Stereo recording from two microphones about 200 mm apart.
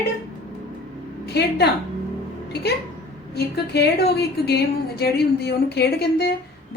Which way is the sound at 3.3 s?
55° left (ahead or behind).